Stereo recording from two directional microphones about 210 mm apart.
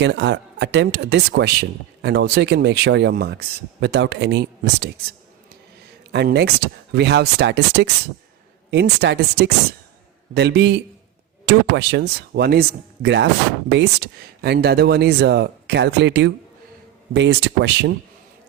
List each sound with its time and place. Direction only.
0.0 s speech: 55° right (ahead or behind)
6.1 s speech: 55° right (ahead or behind)